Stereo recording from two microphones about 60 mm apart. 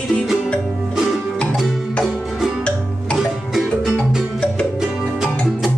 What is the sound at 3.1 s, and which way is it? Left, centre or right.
Music, centre.